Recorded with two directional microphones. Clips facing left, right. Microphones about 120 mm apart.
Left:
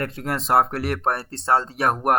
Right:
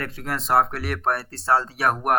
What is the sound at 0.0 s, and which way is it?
Speech, 30° left (ahead or behind).